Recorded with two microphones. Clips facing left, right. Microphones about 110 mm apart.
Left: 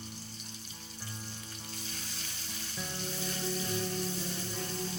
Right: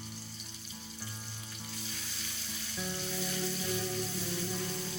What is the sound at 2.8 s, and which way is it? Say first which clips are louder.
Frying: right 3 dB; 10° right (ahead or behind).